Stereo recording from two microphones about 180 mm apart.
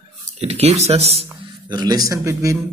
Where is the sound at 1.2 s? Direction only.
20° right (ahead or behind).